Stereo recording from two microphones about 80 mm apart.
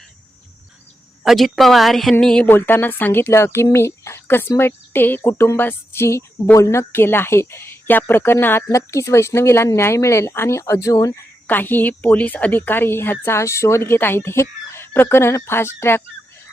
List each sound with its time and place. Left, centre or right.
1.2 s speech: centre
2.5 s a woman's voice: left
8.7 s a woman's voice: left
11.4 s a woman's voice: left